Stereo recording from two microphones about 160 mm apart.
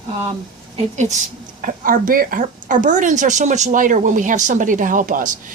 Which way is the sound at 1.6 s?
60° right (ahead or behind).